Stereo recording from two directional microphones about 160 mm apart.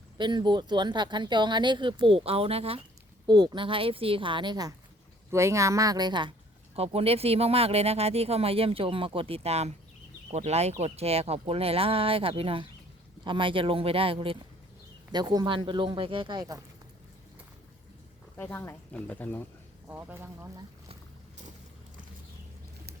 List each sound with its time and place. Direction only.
0.2 s speech: 30° right (ahead or behind)
3.2 s speech: 25° right (ahead or behind)
6.7 s speech: 40° right (ahead or behind)
15.1 s speech: 25° right (ahead or behind)
18.3 s speech: 10° left (ahead or behind)
19.9 s speech: 10° right (ahead or behind)